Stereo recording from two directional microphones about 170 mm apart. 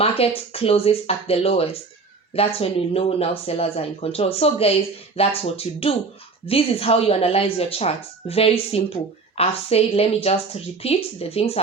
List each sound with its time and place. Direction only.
0.0 s speech: 35° left (ahead or behind)